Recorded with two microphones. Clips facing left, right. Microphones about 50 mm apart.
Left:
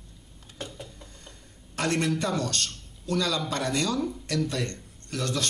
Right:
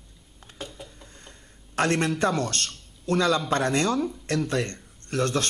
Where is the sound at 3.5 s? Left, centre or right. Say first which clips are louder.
Right 4 dB; right.